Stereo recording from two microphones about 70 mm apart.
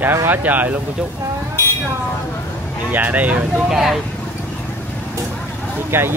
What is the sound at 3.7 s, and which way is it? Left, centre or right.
Speech, centre.